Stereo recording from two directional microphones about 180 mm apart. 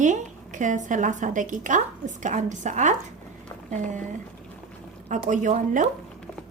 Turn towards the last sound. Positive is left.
turn(degrees=-45)  # may be behind; listen again after turning